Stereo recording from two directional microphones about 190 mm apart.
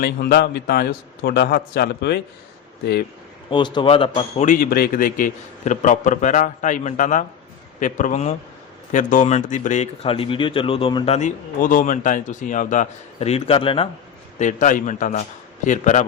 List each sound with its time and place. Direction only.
0.0 s a man's voice: 55° left (ahead or behind)
3.5 s speech: 25° left (ahead or behind)
14.3 s a man's voice: 40° left (ahead or behind)